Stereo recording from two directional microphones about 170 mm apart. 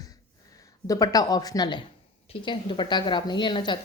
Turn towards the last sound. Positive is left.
turn(degrees=25)  # may be behind; listen again after turning